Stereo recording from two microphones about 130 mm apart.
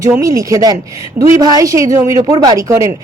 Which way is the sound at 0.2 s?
25° right (ahead or behind).